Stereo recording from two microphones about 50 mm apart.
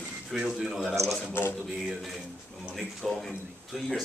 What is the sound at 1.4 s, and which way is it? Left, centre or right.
Speech, left.